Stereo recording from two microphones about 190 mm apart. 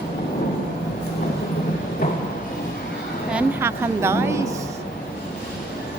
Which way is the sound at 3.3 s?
15° right (ahead or behind).